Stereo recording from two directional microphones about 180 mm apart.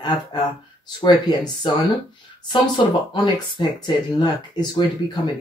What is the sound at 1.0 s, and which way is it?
Speech, 25° left (ahead or behind).